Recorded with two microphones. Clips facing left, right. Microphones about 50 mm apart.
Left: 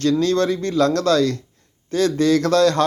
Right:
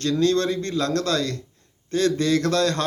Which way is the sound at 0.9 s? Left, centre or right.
Right.